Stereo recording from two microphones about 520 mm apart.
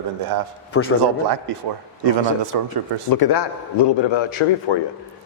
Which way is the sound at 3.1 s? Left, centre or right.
Left.